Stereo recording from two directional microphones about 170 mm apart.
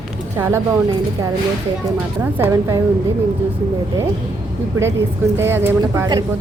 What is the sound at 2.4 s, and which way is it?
Speech, 15° right (ahead or behind).